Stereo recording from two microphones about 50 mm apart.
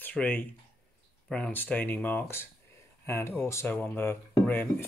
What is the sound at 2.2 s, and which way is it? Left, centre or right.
Speech, left.